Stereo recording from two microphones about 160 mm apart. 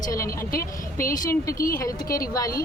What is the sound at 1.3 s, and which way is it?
Speech, 20° left (ahead or behind).